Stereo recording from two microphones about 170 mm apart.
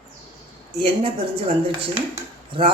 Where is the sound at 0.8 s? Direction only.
35° right (ahead or behind).